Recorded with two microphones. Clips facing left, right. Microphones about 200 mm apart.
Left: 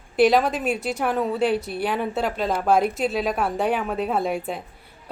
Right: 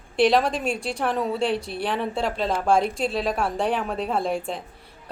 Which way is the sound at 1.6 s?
30° right (ahead or behind).